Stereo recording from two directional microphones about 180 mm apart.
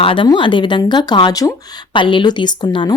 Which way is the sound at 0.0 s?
30° left (ahead or behind).